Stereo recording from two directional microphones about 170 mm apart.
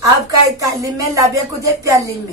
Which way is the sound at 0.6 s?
20° right (ahead or behind).